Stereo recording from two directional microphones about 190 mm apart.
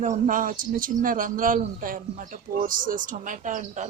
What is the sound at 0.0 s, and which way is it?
Speech, 40° right (ahead or behind).